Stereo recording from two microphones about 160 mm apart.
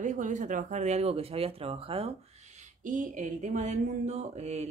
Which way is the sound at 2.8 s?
55° right (ahead or behind).